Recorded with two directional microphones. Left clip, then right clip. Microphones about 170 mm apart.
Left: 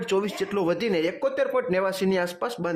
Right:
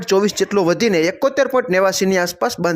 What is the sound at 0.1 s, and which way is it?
Speech, 35° right (ahead or behind).